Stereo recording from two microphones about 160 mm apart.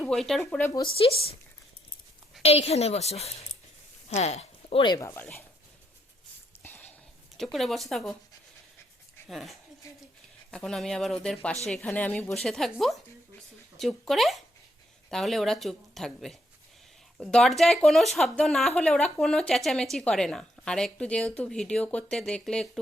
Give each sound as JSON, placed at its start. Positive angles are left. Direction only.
{"t": 0.0, "sound": "speech", "side_deg": 0}
{"t": 0.8, "sound": "a woman's voice", "side_deg": 35}
{"t": 2.4, "sound": "a woman's voice", "side_deg": 40}
{"t": 5.0, "sound": "speech", "side_deg": 15}
{"t": 6.6, "sound": "a sound", "side_deg": 10}
{"t": 7.3, "sound": "speech", "side_deg": 0}
{"t": 9.2, "sound": "speech", "side_deg": 0}